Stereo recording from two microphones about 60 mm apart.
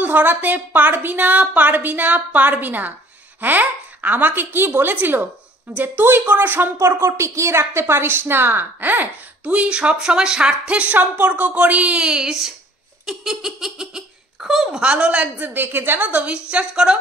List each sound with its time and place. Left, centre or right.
0.0 s a woman's voice: right
6.8 s a woman's voice: right; by 14.8 s centre
14.8 s a woman's voice: right